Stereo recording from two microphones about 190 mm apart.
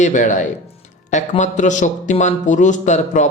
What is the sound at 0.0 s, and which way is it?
Speech, 40° left (ahead or behind).